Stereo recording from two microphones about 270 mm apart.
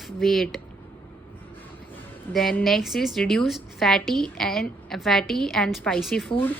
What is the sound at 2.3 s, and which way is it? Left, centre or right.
A woman's voice, centre.